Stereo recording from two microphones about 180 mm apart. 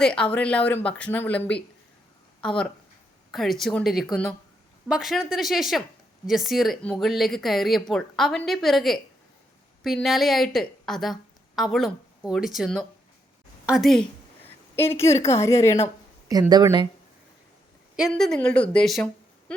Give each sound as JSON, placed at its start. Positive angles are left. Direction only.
{"t": 0.0, "sound": "a woman's voice", "side_deg": 5}
{"t": 16.3, "sound": "speech", "side_deg": -20}
{"t": 18.1, "sound": "a woman's voice", "side_deg": 5}